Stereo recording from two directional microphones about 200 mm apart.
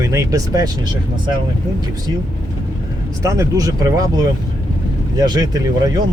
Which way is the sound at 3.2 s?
15° right (ahead or behind).